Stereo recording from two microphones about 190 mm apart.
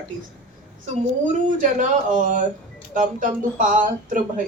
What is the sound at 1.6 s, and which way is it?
A man's voice, 45° right (ahead or behind).